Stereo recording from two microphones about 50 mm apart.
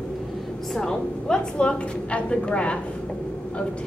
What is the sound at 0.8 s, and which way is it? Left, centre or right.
A woman's voice, centre.